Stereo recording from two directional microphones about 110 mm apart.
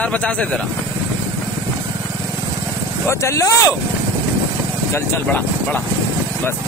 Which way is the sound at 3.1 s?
25° left (ahead or behind).